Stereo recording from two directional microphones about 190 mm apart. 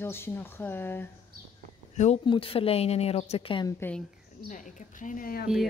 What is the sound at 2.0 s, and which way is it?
Speech, 30° left (ahead or behind).